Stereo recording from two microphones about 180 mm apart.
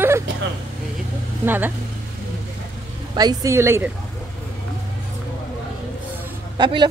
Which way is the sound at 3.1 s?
20° right (ahead or behind).